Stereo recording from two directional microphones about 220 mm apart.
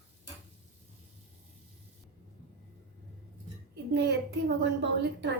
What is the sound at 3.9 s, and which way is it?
A woman's voice, 50° right (ahead or behind).